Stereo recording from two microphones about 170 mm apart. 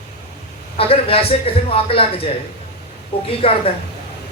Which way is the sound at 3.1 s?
65° left (ahead or behind).